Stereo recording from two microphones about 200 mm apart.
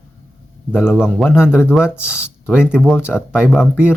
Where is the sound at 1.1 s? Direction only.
Centre (ahead or behind).